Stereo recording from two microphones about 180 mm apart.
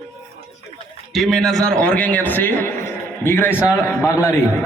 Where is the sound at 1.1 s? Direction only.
Centre (ahead or behind).